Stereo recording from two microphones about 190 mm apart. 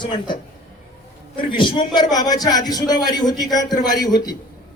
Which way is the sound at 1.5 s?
25° left (ahead or behind).